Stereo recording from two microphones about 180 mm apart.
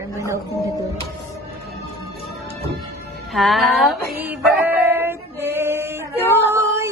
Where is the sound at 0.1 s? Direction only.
15° right (ahead or behind).